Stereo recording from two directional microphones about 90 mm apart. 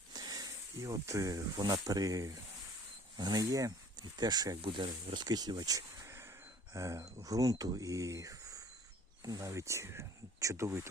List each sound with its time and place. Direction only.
0.1 s snake: 45° right (ahead or behind)
1.5 s speech: 45° right (ahead or behind)
6.1 s a sound: 30° right (ahead or behind)
6.7 s speech: 35° right (ahead or behind)